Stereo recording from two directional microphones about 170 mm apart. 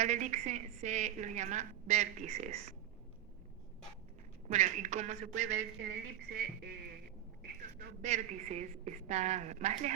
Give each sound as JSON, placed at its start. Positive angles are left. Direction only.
{"t": 0.0, "sound": "a woman's voice", "side_deg": -45}
{"t": 4.4, "sound": "a woman's voice", "side_deg": -45}
{"t": 8.0, "sound": "a woman's voice", "side_deg": -40}